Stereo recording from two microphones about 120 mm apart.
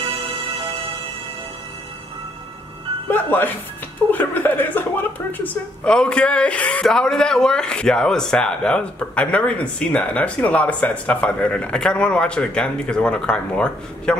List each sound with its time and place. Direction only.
3.1 s a woman's voice: 15° left (ahead or behind)